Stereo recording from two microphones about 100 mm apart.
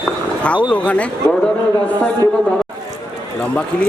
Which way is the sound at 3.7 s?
15° left (ahead or behind).